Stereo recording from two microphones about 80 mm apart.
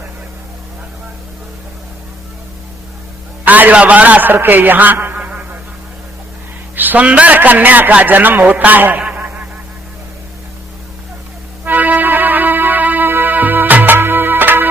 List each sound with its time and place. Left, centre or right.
3.4 s a man's voice: right
6.7 s a man's voice: right
11.6 s music: right